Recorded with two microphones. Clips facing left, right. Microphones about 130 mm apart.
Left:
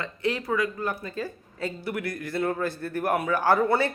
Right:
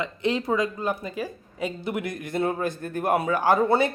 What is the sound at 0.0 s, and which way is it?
Speech, 20° right (ahead or behind).